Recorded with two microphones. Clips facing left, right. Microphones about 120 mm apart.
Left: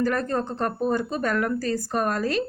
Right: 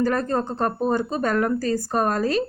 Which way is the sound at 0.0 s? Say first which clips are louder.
Right 2 dB; 35° right (ahead or behind).